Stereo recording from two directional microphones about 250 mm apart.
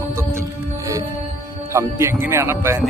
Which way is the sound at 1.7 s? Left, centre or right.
Centre.